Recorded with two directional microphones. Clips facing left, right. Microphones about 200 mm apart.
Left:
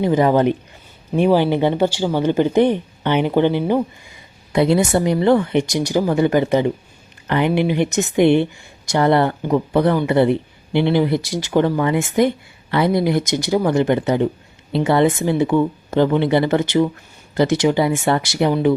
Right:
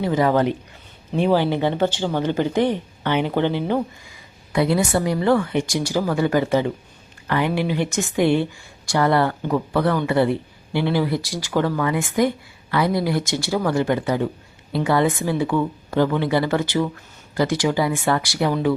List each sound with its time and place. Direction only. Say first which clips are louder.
0.0 s speech: left 4 dB; 20° left (ahead or behind)